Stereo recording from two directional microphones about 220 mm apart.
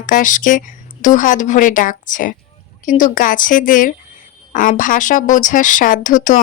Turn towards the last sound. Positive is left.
turn(degrees=35)  # may be behind; listen again after turning